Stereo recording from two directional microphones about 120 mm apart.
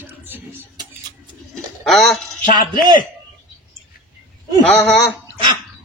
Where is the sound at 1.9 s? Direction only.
Centre (ahead or behind).